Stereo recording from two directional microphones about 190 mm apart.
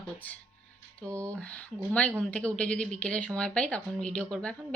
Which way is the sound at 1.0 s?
15° right (ahead or behind).